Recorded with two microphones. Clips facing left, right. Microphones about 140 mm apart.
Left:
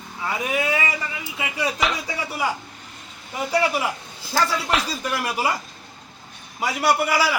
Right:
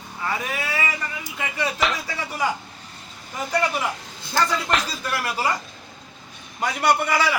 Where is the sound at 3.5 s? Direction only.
10° left (ahead or behind).